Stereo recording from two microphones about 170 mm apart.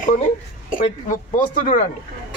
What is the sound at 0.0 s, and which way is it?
A woman's voice, 45° left (ahead or behind).